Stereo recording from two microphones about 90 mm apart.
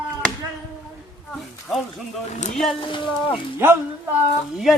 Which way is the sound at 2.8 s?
70° left (ahead or behind).